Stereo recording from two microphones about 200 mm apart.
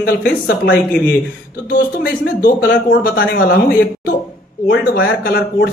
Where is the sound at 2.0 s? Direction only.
50° left (ahead or behind).